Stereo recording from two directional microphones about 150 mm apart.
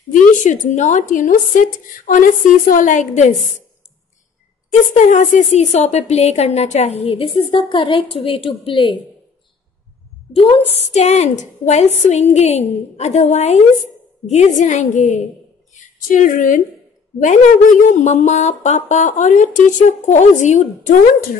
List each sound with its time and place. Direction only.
0.1 s a woman's voice: 55° left (ahead or behind)
4.9 s a woman's voice: 55° left (ahead or behind); by 8.9 s 35° left (ahead or behind)
10.3 s a woman's voice: 40° left (ahead or behind); by 20.9 s 55° left (ahead or behind)